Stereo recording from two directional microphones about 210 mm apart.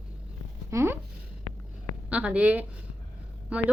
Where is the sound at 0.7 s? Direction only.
15° right (ahead or behind).